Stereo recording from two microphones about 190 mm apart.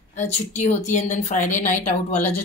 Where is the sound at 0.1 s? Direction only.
40° left (ahead or behind).